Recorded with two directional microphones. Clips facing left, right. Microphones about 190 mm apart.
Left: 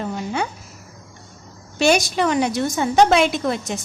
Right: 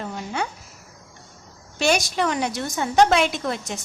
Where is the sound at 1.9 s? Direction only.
20° left (ahead or behind).